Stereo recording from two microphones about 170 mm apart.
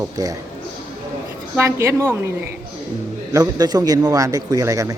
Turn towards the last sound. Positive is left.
turn(degrees=-20)  # may be behind; listen again after turning